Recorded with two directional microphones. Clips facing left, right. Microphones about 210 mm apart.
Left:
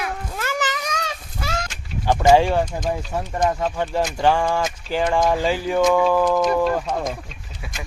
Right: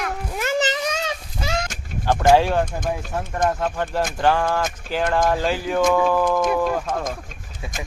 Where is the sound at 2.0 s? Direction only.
10° left (ahead or behind).